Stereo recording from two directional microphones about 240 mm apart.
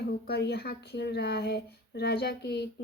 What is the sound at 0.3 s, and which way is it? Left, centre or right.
Speech, left.